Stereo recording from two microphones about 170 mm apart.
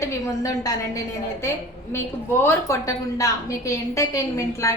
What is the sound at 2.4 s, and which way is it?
A woman's voice, 15° left (ahead or behind).